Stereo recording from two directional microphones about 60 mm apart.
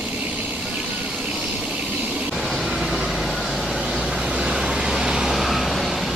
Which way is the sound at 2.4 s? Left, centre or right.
Centre.